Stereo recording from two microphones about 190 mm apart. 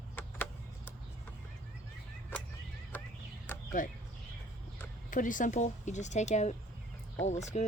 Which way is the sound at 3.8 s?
45° left (ahead or behind).